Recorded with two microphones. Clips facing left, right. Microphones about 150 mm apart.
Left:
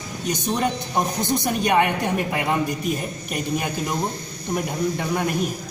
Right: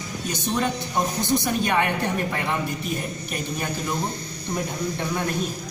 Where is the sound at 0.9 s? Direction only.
15° left (ahead or behind).